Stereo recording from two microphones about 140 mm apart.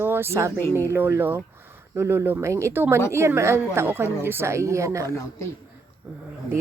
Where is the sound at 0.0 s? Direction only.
15° right (ahead or behind).